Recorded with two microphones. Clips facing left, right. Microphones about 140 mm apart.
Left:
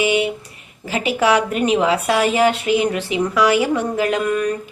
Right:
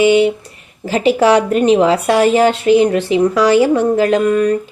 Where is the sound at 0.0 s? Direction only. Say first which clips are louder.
Right 8 dB; 30° right (ahead or behind).